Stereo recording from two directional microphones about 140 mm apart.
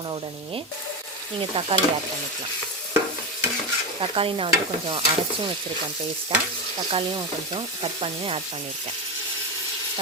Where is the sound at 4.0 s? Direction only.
40° right (ahead or behind).